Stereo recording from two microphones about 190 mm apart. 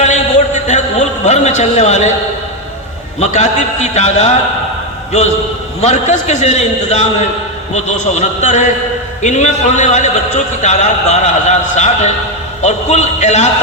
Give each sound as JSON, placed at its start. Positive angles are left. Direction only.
{"t": 0.0, "sound": "a sound", "side_deg": 40}
{"t": 3.2, "sound": "a man's voice", "side_deg": 35}
{"t": 5.8, "sound": "a man's voice", "side_deg": 35}